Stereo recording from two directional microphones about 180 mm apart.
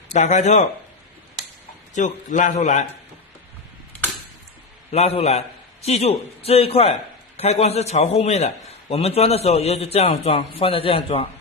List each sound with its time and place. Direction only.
0.1 s a man's voice: 40° left (ahead or behind)
2.0 s a man's voice: 45° left (ahead or behind)
4.9 s a man's voice: 35° left (ahead or behind)